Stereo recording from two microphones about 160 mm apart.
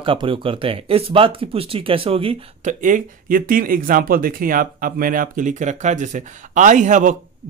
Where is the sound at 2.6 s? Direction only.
55° right (ahead or behind).